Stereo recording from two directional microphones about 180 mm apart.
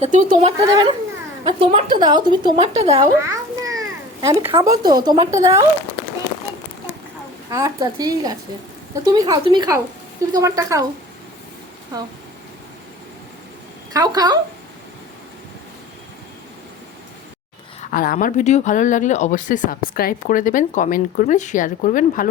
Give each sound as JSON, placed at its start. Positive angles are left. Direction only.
{"t": 0.0, "sound": "speech", "side_deg": -40}
{"t": 0.7, "sound": "a woman's voice", "side_deg": -20}
{"t": 3.2, "sound": "children playing", "side_deg": -20}
{"t": 4.2, "sound": "a woman's voice", "side_deg": -15}
{"t": 7.5, "sound": "a woman's voice", "side_deg": -20}
{"t": 11.9, "sound": "a woman's voice", "side_deg": -20}
{"t": 13.9, "sound": "a woman's voice", "side_deg": -20}
{"t": 17.7, "sound": "speech", "side_deg": 50}